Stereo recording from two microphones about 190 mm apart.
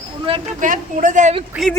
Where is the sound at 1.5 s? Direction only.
Centre (ahead or behind).